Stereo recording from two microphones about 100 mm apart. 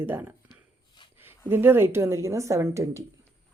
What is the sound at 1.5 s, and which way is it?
A woman's voice, 20° right (ahead or behind).